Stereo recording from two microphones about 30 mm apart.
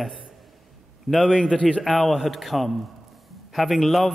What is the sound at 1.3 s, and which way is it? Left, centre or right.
Speech, centre.